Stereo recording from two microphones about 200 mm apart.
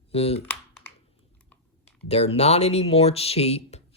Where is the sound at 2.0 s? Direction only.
30° left (ahead or behind).